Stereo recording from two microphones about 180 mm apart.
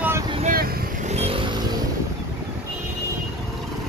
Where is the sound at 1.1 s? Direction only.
35° right (ahead or behind).